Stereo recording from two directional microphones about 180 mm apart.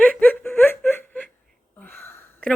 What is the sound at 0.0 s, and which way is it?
Laughter, 5° left (ahead or behind).